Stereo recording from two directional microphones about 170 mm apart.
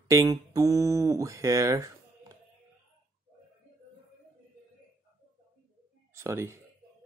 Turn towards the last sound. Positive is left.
turn(degrees=-15)  # may be behind; listen again after turning